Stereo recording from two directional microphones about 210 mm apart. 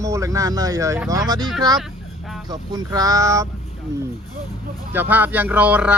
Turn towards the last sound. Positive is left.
turn(degrees=-5)  # may be behind; listen again after turning